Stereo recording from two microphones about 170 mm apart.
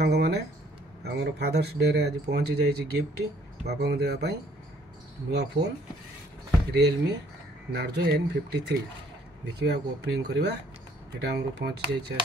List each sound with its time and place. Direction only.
0.0 s a sound: 75° right (ahead or behind)
1.0 s speech: 75° right (ahead or behind)
6.7 s speech: 75° right (ahead or behind)